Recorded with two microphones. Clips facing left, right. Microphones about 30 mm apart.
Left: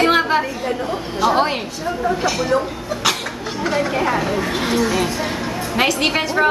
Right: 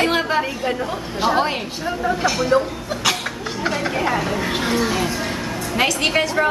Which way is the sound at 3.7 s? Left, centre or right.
Centre.